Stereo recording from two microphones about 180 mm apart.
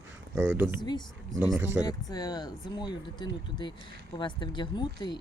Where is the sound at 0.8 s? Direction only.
25° left (ahead or behind).